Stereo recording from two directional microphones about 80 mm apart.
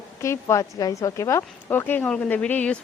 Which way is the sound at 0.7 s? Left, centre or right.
Left.